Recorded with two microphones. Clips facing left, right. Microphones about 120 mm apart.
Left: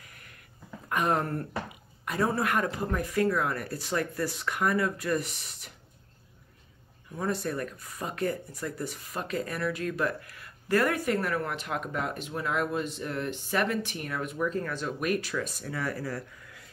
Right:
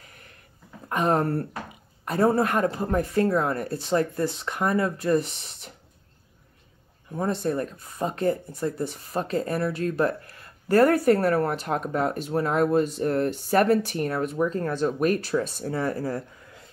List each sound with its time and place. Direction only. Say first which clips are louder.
0.8 s speech: right 5 dB; 30° right (ahead or behind)
7.2 s speech: right 5 dB; 25° right (ahead or behind)